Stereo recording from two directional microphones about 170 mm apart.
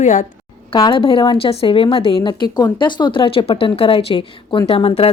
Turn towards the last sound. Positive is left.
turn(degrees=35)  # may be behind; listen again after turning